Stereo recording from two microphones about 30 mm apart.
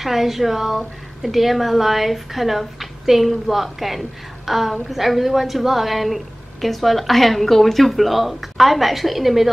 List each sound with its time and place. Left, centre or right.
0.0 s a woman's voice: centre